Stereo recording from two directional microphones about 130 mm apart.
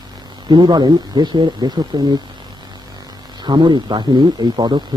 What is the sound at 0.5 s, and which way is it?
Speech, 35° right (ahead or behind).